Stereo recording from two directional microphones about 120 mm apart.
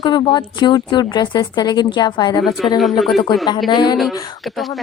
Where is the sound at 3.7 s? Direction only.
40° left (ahead or behind).